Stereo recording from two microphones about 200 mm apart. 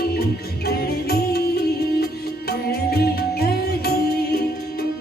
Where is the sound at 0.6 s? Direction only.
50° left (ahead or behind).